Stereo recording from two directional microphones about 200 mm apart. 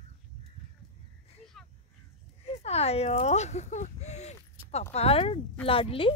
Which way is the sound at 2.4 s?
30° left (ahead or behind).